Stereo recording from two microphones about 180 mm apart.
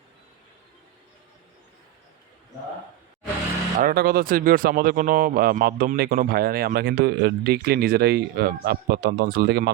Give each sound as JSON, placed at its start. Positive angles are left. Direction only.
{"t": 3.8, "sound": "speech", "side_deg": -55}